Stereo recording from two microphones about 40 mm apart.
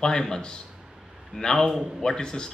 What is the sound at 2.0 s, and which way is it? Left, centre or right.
Speech, centre.